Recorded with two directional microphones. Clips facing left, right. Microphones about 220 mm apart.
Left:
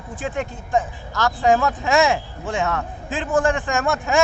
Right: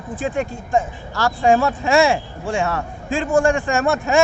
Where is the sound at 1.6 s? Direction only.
15° right (ahead or behind).